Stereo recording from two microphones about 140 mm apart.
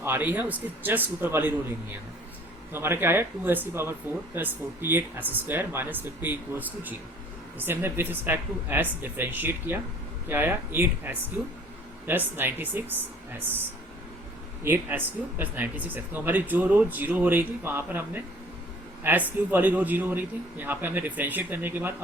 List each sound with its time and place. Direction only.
0.0 s speech: 15° right (ahead or behind)
2.7 s speech: 15° right (ahead or behind)
14.6 s speech: 15° right (ahead or behind)